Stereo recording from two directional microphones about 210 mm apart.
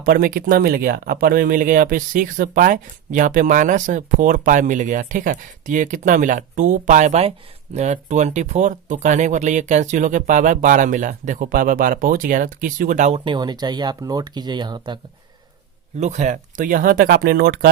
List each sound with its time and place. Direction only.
0.0 s speech: 45° right (ahead or behind); by 14.9 s 20° right (ahead or behind)
16.0 s speech: 35° right (ahead or behind)